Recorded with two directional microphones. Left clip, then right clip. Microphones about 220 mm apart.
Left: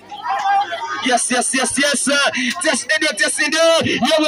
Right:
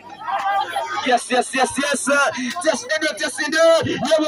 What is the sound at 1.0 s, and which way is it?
Music, 50° left (ahead or behind).